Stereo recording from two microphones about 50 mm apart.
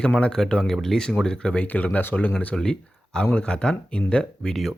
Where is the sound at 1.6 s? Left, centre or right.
Left.